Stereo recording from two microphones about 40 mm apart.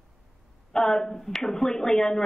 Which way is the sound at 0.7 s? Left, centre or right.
Centre.